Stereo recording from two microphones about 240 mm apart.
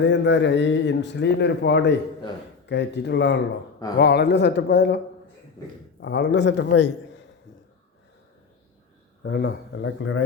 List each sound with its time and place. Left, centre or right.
0.0 s a man's voice: left
6.0 s a man's voice: left
9.2 s a man's voice: left